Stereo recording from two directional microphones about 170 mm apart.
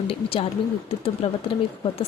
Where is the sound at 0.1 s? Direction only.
35° left (ahead or behind).